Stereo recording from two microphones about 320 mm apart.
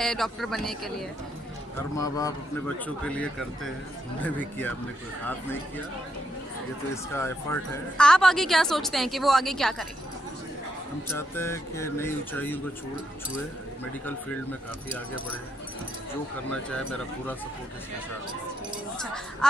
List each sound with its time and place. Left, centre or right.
0.0 s a woman's voice: centre
6.9 s a woman's voice: centre
11.1 s speech: centre
16.4 s a woman's voice: centre